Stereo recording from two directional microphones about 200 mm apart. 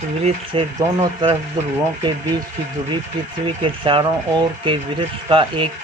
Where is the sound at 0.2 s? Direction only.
30° right (ahead or behind).